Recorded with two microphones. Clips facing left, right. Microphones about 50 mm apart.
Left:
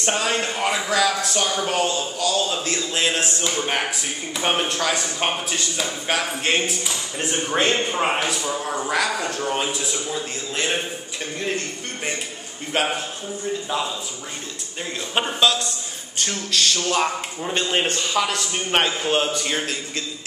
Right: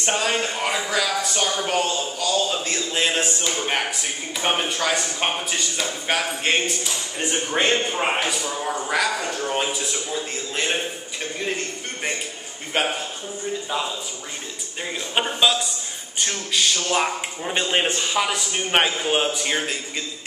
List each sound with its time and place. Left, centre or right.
0.0 s speech: centre
12.7 s speech: centre
15.4 s speech: centre